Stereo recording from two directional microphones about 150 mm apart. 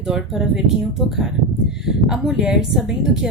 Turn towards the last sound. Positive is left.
turn(degrees=-5)  # may be behind; listen again after turning